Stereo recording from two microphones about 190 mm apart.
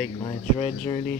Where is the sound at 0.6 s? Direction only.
30° left (ahead or behind).